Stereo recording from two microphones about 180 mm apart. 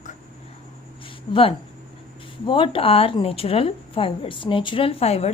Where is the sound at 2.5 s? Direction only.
30° left (ahead or behind).